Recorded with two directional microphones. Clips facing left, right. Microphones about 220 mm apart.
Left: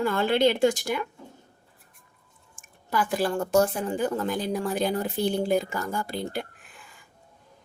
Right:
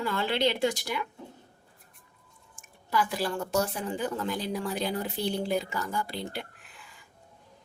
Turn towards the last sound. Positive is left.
turn(degrees=45)  # may be behind; listen again after turning